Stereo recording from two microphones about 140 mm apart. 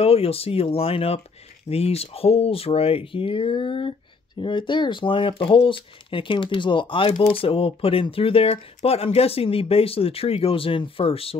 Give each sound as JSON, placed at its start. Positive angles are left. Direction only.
{"t": 0.0, "sound": "speech", "side_deg": 45}